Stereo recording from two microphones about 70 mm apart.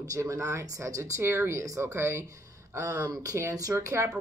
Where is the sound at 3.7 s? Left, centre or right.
Right.